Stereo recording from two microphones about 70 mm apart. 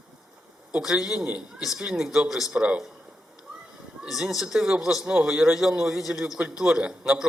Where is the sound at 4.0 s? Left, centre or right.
Centre.